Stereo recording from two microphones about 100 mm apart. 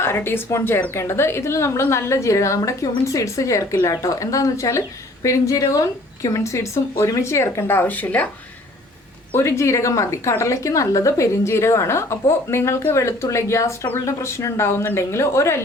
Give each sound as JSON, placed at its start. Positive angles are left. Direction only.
{"t": 0.0, "sound": "a woman's voice", "side_deg": 25}
{"t": 9.4, "sound": "a woman's voice", "side_deg": 30}